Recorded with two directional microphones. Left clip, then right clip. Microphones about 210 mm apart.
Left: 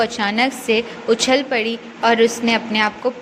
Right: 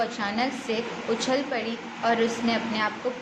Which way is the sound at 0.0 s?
40° left (ahead or behind).